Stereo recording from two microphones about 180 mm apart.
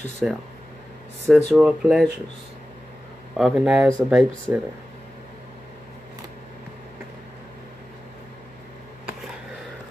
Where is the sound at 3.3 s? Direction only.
Centre (ahead or behind).